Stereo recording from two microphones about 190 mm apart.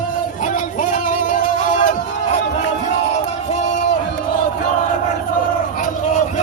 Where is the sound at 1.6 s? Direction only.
40° left (ahead or behind).